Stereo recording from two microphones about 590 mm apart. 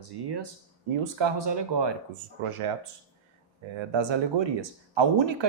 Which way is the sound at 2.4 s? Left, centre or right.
Right.